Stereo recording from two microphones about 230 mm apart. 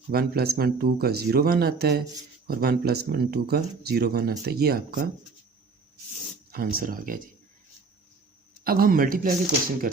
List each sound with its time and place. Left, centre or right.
0.1 s speech: right
6.5 s speech: right
8.6 s speech: right